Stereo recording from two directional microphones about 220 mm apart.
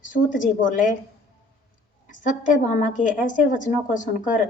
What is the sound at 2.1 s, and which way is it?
A woman's voice, 35° left (ahead or behind).